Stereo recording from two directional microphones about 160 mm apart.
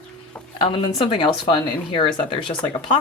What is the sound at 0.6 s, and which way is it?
Speech, 35° left (ahead or behind).